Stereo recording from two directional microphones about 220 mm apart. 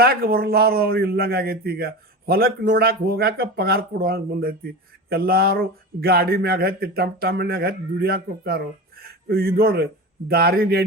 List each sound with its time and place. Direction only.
0.0 s speech: 45° right (ahead or behind)